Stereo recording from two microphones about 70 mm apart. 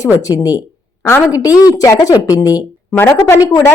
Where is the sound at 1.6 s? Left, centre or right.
Left.